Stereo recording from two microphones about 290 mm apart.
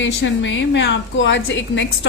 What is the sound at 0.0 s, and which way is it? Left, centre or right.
A woman's voice, left.